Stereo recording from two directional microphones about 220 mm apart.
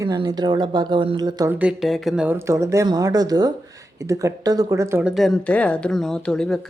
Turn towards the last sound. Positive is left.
turn(degrees=5)  # may be behind; listen again after turning